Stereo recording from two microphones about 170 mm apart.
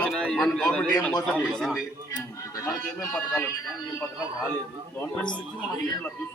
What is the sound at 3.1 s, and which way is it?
Speech, 5° left (ahead or behind).